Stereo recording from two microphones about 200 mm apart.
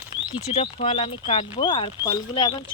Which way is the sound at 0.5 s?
30° left (ahead or behind).